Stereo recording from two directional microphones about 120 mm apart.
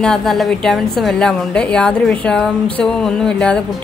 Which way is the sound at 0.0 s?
5° left (ahead or behind).